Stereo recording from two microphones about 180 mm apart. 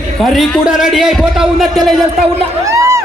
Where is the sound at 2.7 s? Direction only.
15° right (ahead or behind).